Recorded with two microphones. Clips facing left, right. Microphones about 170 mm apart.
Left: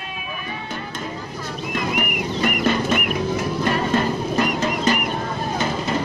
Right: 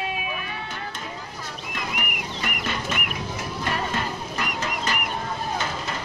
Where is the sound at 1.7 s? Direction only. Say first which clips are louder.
Left 8 dB; 50° left (ahead or behind).